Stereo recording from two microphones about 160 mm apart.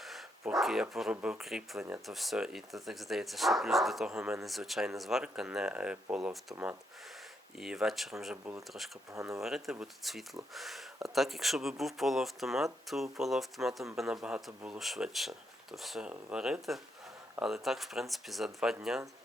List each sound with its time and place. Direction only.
0.0 s a sound: centre (ahead or behind)
1.1 s speech: 5° right (ahead or behind)
7.6 s speech: 5° right (ahead or behind)
9.1 s speech: 20° right (ahead or behind)
9.4 s speech: centre (ahead or behind)